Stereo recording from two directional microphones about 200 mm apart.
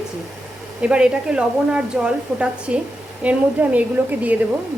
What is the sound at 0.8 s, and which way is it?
A woman's voice, 5° right (ahead or behind).